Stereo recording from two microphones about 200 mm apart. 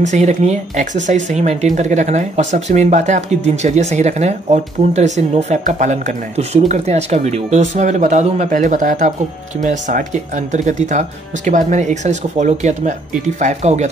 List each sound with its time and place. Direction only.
0.0 s speech: 35° right (ahead or behind)